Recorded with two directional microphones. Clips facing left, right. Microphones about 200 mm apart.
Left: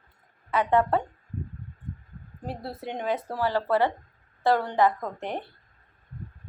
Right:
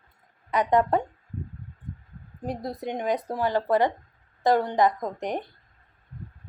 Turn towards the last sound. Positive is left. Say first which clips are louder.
# right 3 dB
turn(degrees=-15)  # may be behind; listen again after turning